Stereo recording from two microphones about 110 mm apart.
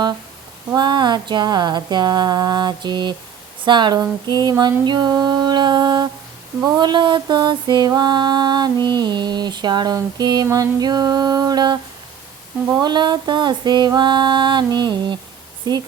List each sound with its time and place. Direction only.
0.8 s mantra: 40° right (ahead or behind)